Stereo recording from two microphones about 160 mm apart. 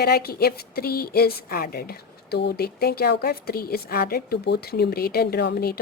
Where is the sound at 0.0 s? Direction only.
75° left (ahead or behind).